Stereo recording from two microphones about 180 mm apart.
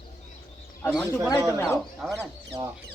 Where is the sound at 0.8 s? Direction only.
10° left (ahead or behind).